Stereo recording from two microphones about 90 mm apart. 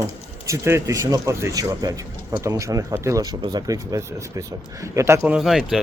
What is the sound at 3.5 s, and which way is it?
Speech, 45° right (ahead or behind).